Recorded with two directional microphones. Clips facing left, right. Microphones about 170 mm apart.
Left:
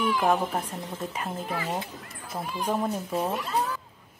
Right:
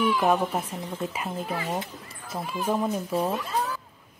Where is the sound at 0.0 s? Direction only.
5° right (ahead or behind).